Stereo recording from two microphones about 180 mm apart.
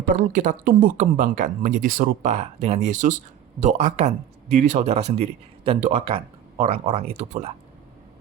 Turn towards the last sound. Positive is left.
turn(degrees=-35)  # may be behind; listen again after turning